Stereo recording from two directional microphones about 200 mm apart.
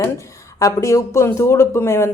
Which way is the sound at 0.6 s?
15° left (ahead or behind).